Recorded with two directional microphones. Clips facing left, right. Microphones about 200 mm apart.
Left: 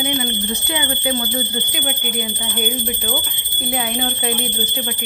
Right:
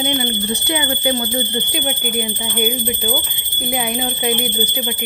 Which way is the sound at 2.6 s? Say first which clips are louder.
Right 4 dB; 10° right (ahead or behind).